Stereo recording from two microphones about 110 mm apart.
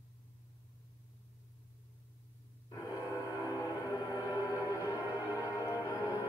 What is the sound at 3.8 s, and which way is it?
Music, 35° left (ahead or behind).